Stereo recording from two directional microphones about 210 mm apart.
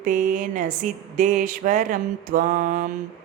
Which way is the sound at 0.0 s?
40° right (ahead or behind).